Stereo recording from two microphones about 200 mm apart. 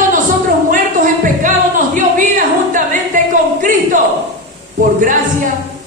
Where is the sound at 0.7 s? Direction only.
40° right (ahead or behind).